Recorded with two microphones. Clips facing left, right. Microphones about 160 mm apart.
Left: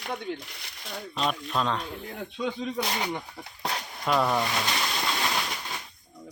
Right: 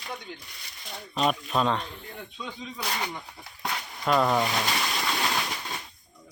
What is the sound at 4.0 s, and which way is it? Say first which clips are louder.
Speech: right 2 dB; centre (ahead or behind).